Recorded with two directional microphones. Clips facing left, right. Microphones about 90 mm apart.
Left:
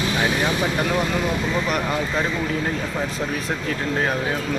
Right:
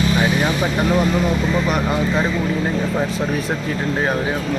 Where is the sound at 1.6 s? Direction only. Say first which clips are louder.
Right 4 dB; 5° right (ahead or behind).